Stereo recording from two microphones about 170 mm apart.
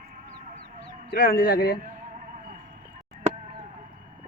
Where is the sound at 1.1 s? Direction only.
60° left (ahead or behind).